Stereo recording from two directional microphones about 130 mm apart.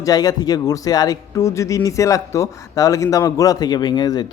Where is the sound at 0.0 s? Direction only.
30° left (ahead or behind).